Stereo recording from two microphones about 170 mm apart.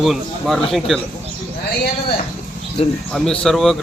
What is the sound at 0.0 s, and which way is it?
Speech, centre (ahead or behind).